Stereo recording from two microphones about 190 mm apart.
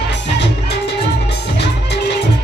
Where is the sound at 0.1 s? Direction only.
65° left (ahead or behind).